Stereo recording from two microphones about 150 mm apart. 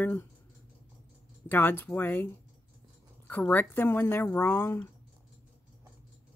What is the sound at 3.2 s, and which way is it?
Speech, 10° left (ahead or behind).